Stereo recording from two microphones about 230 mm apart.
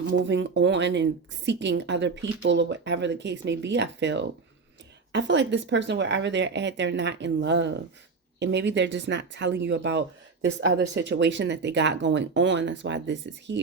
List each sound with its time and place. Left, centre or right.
0.0 s speech: right